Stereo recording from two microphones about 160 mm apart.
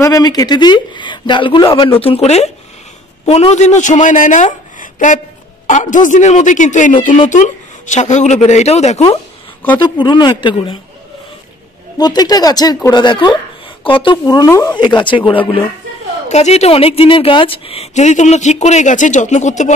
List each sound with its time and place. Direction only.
0.0 s a man's voice: 25° left (ahead or behind); by 9.0 s 45° left (ahead or behind)
9.8 s speech: 30° left (ahead or behind)
12.0 s speech: 25° left (ahead or behind)
16.3 s a woman's voice: 45° left (ahead or behind)